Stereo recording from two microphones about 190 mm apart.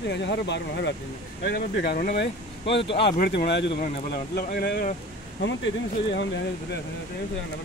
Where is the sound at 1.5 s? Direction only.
55° left (ahead or behind).